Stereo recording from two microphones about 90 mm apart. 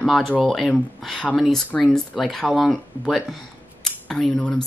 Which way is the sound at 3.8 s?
5° left (ahead or behind).